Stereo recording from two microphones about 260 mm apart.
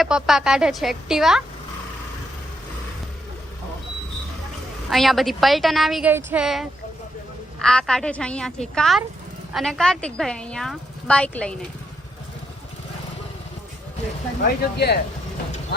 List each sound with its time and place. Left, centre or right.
0.0 s a woman's voice: centre
4.9 s a woman's voice: centre
14.4 s speech: left